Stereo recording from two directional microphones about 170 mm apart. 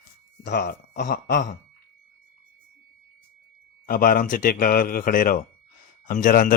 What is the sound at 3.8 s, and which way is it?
Speech, 55° left (ahead or behind).